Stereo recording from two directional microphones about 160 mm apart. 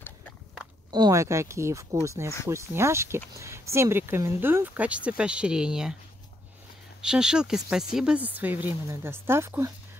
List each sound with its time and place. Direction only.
0.9 s speech: 20° right (ahead or behind); by 5.9 s 5° right (ahead or behind)
7.0 s speech: 5° right (ahead or behind)